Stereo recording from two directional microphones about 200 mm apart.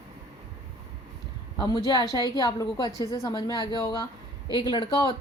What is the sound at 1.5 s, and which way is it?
Speech, 20° left (ahead or behind).